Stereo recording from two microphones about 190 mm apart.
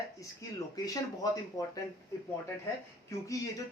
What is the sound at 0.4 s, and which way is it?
Speech, 15° left (ahead or behind).